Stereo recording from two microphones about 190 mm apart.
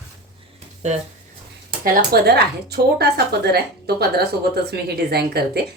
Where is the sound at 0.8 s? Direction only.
35° right (ahead or behind).